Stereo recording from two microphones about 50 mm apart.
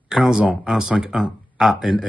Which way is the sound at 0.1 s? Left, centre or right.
Centre.